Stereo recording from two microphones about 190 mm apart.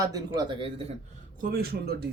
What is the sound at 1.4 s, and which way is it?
Speech, 55° right (ahead or behind).